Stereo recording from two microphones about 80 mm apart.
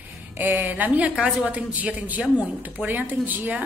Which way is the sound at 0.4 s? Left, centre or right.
Right.